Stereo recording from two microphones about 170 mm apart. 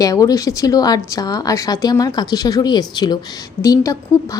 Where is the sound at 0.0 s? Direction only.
20° left (ahead or behind).